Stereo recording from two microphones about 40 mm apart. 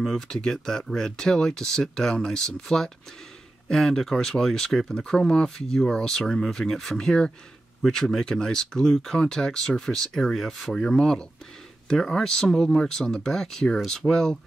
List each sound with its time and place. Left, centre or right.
0.0 s speech: centre
14.0 s speech: centre